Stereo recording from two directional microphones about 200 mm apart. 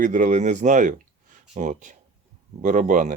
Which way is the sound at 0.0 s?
40° right (ahead or behind).